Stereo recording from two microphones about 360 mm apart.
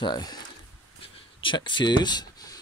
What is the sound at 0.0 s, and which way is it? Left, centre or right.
Speech, centre.